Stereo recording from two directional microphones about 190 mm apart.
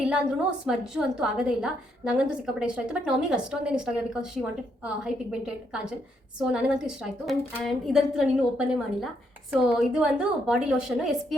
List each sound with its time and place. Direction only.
0.0 s a woman's voice: 5° right (ahead or behind)